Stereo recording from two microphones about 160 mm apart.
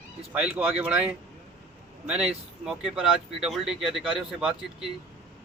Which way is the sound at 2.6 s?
5° right (ahead or behind).